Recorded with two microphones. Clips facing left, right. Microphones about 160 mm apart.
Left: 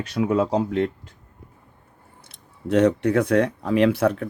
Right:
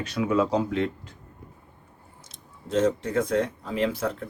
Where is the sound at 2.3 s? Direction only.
65° left (ahead or behind).